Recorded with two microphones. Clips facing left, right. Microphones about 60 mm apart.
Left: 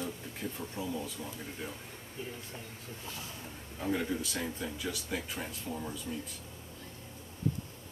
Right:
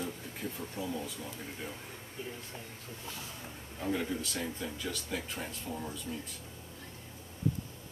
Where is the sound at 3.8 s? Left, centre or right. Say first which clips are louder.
Left 1 dB; centre.